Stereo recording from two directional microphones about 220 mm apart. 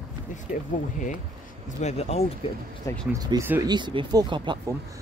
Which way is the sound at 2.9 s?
15° left (ahead or behind).